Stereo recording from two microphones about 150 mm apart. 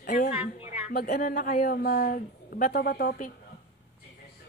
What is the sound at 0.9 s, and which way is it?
A woman's voice, 75° left (ahead or behind).